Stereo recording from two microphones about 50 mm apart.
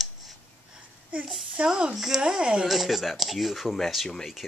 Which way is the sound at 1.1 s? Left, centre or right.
Right.